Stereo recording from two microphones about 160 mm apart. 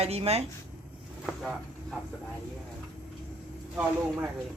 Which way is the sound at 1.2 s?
Centre (ahead or behind).